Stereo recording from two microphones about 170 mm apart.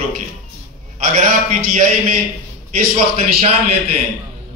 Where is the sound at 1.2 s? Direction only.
50° right (ahead or behind).